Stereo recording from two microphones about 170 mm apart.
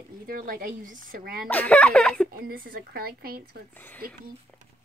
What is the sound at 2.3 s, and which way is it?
Speech, 60° right (ahead or behind).